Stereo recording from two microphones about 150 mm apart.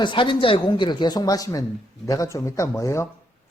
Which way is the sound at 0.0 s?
35° left (ahead or behind).